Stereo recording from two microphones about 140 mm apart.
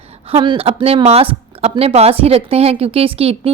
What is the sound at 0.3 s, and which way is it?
A woman's voice, 35° right (ahead or behind).